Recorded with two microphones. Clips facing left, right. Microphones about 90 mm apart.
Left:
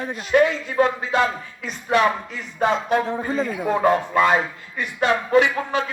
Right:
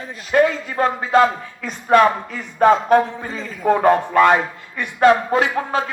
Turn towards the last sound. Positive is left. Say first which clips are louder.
# left 1 dB
turn(degrees=-35)  # may be behind; listen again after turning